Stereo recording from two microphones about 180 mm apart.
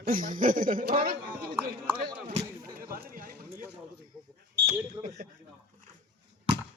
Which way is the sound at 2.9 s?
50° right (ahead or behind).